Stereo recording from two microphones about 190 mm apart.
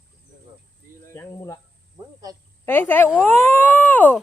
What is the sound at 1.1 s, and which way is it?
Speech, 15° left (ahead or behind).